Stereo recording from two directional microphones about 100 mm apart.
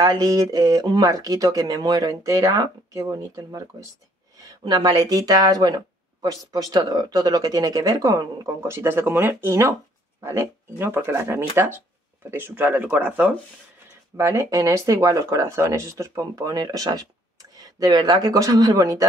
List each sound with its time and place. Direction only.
0.0 s speech: 35° right (ahead or behind); by 13.3 s 15° right (ahead or behind)
14.1 s speech: 30° right (ahead or behind)